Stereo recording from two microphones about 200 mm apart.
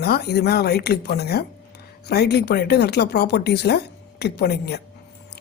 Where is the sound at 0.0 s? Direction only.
55° left (ahead or behind).